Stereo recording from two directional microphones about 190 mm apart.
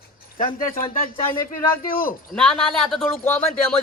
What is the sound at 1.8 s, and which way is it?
Speech, 50° left (ahead or behind).